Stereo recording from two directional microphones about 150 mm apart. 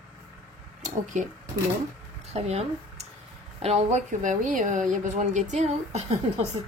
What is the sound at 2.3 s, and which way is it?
Speech, 45° right (ahead or behind).